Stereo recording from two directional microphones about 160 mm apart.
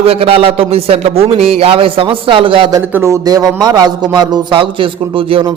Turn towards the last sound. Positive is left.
turn(degrees=-35)  # may be behind; listen again after turning